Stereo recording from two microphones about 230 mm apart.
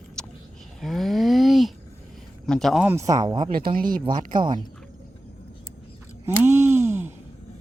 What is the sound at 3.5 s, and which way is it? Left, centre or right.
Speech, right.